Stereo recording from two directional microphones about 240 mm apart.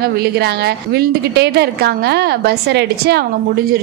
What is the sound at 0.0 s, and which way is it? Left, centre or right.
A woman's voice, right.